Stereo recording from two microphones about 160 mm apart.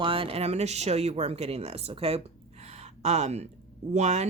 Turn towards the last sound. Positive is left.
turn(degrees=-45)  # may be behind; listen again after turning